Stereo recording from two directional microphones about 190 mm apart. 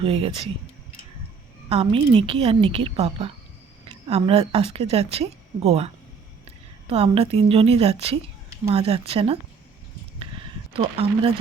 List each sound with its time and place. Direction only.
0.0 s a woman's voice: 30° right (ahead or behind)
1.7 s a woman's voice: 30° right (ahead or behind)
10.8 s a woman's voice: 30° right (ahead or behind)